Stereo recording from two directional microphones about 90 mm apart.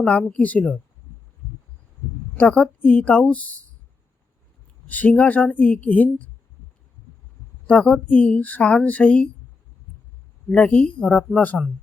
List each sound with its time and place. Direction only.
0.0 s speech: 10° left (ahead or behind)
2.4 s speech: 15° left (ahead or behind)
4.9 s speech: 20° left (ahead or behind)
7.7 s speech: 10° left (ahead or behind)
10.5 s speech: 15° left (ahead or behind)